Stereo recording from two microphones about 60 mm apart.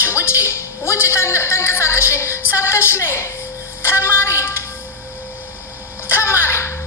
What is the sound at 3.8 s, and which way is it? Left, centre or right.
Music, left.